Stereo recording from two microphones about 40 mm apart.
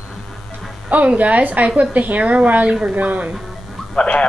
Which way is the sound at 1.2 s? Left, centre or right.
Right.